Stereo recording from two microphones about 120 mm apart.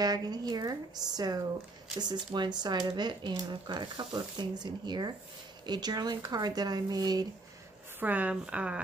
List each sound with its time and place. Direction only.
0.0 s speech: 35° right (ahead or behind)
8.0 s a woman's voice: 15° right (ahead or behind)